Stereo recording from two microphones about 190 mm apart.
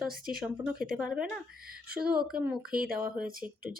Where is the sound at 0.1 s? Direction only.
50° right (ahead or behind).